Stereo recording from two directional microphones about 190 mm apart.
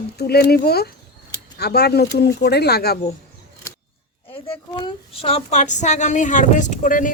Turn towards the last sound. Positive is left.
turn(degrees=45)  # may be behind; listen again after turning